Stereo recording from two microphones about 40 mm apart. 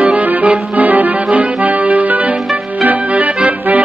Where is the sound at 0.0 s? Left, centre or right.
Right.